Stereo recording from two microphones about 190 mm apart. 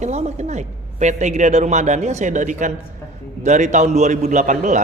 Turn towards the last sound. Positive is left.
turn(degrees=-40)  # may be behind; listen again after turning